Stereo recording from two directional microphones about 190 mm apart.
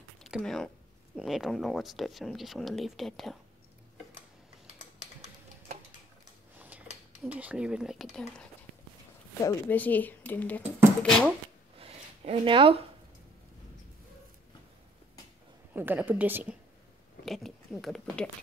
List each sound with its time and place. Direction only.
0.2 s speech: centre (ahead or behind)
6.6 s a sound: 10° right (ahead or behind)
7.1 s speech: 5° right (ahead or behind)
9.4 s speech: 15° left (ahead or behind)
11.8 s a sound: 30° right (ahead or behind)
15.7 s a woman's voice: 10° right (ahead or behind); by 18.3 s 5° left (ahead or behind)